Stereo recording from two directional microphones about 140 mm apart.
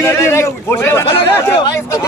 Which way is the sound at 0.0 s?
20° left (ahead or behind).